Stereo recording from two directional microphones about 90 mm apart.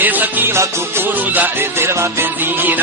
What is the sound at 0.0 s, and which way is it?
Music, 20° right (ahead or behind).